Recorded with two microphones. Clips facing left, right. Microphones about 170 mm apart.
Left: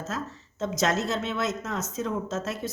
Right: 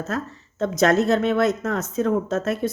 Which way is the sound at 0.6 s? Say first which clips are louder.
Right 8 dB; 60° right (ahead or behind).